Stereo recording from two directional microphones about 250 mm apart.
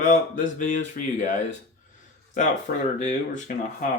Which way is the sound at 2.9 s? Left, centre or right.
Left.